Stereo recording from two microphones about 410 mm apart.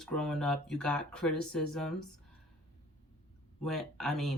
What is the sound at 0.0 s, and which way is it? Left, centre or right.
Speech, centre.